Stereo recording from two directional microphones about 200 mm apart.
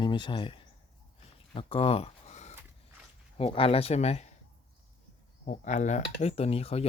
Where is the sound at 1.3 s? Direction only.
25° left (ahead or behind).